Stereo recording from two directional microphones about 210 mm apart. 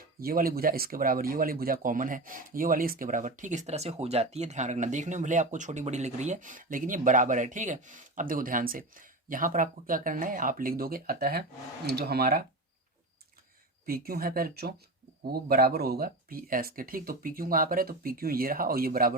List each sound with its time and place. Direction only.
0.2 s speech: 45° right (ahead or behind)
13.8 s speech: 45° right (ahead or behind)